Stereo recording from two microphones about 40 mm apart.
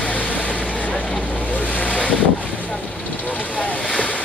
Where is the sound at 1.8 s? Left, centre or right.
Left.